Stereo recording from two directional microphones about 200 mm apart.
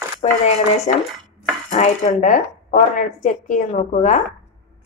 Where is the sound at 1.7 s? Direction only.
35° left (ahead or behind).